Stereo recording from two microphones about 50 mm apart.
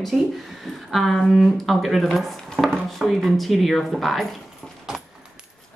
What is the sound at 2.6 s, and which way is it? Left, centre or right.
Speech, right.